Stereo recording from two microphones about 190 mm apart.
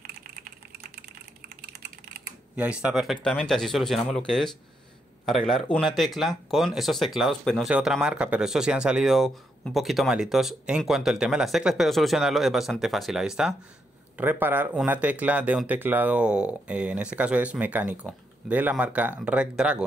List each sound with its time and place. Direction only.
1.7 s typing: 55° right (ahead or behind)
2.5 s speech: 5° right (ahead or behind)